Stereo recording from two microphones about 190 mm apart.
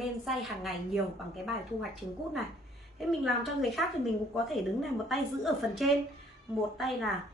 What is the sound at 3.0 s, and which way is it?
Speech, centre (ahead or behind).